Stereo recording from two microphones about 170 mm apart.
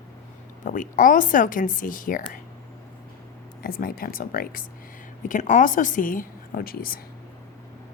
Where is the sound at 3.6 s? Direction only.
60° left (ahead or behind).